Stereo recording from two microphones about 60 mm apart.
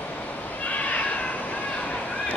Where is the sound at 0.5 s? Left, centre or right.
Left.